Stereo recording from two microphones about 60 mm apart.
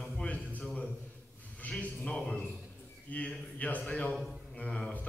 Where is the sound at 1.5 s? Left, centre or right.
Left.